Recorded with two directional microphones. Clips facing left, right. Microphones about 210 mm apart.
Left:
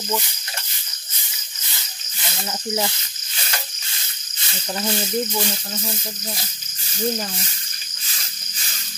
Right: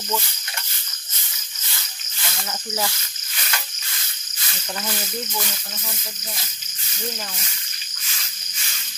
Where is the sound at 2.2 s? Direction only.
20° left (ahead or behind).